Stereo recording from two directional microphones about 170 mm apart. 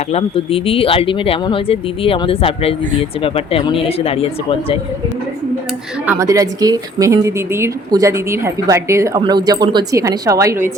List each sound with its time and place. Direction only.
0.1 s speech: 35° left (ahead or behind)
6.1 s a woman's voice: 20° right (ahead or behind)